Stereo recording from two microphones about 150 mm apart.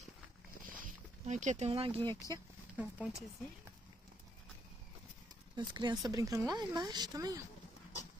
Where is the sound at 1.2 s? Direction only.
55° right (ahead or behind); by 2.2 s 35° right (ahead or behind).